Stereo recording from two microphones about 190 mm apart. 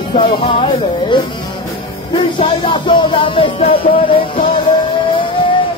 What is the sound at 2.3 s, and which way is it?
Music, 25° left (ahead or behind).